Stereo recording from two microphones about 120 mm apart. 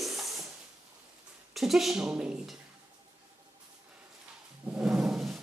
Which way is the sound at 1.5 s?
Centre (ahead or behind).